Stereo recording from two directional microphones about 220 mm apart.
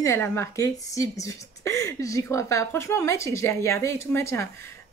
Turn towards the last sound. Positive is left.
turn(degrees=10)  # may be behind; listen again after turning